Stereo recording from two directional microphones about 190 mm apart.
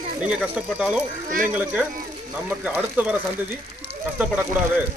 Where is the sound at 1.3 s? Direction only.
45° right (ahead or behind).